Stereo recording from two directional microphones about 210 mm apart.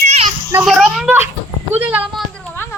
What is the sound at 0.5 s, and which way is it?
A child's voice, centre (ahead or behind).